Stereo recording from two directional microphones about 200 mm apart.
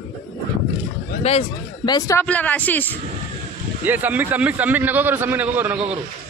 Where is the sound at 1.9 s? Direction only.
15° left (ahead or behind).